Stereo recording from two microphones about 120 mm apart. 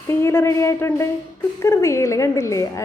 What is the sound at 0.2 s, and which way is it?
A woman's voice, 20° left (ahead or behind).